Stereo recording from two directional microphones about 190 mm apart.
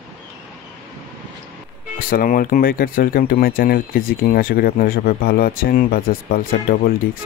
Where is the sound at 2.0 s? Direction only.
50° left (ahead or behind).